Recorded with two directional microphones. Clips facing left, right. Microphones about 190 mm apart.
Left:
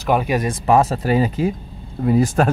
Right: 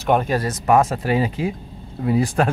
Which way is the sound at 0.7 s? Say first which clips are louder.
Left 1 dB; 35° left (ahead or behind).